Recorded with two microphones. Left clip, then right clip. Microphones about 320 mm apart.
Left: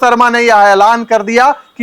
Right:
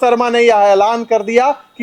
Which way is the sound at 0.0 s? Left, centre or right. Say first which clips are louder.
Left 3 dB; left.